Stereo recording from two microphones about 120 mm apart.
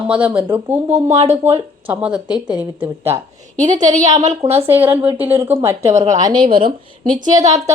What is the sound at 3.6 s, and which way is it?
Speech, 90° right.